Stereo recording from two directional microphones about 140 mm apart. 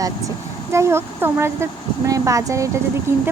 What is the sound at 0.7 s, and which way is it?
Speech, 20° right (ahead or behind).